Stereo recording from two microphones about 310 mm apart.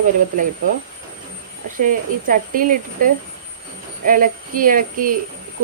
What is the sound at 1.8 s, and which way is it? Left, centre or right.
Speech, right.